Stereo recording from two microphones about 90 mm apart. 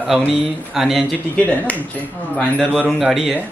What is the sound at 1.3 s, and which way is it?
Speech, 15° left (ahead or behind).